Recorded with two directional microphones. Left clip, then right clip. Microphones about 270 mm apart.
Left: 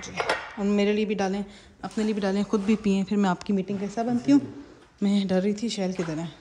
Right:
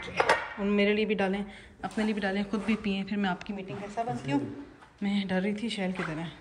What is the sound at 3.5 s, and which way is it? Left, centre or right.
Speech, left.